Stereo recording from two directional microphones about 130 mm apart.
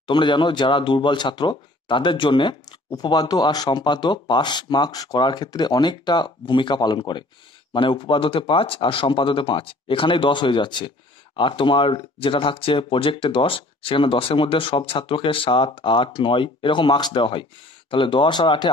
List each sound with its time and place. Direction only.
0.0 s speech: 35° left (ahead or behind)